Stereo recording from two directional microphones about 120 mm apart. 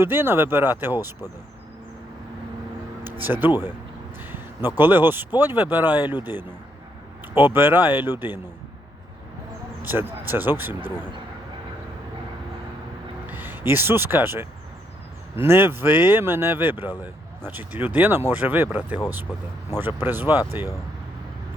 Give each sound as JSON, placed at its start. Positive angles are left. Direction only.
{"t": 0.0, "sound": "speech", "side_deg": -20}
{"t": 3.0, "sound": "a sound", "side_deg": -15}
{"t": 4.2, "sound": "speech", "side_deg": -15}
{"t": 9.8, "sound": "speech", "side_deg": -15}
{"t": 13.2, "sound": "speech", "side_deg": -15}
{"t": 19.3, "sound": "speech", "side_deg": 35}
{"t": 19.8, "sound": "speech", "side_deg": -15}